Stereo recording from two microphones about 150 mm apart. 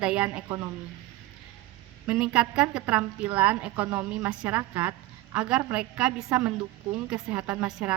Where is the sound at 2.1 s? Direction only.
5° right (ahead or behind).